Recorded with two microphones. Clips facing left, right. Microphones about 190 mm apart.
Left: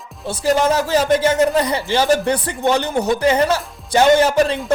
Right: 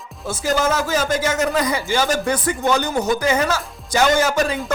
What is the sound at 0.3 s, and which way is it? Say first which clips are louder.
Speech: left 3 dB; 30° left (ahead or behind).